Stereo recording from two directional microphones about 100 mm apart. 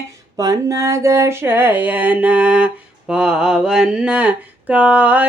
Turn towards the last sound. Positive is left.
turn(degrees=-15)  # may be behind; listen again after turning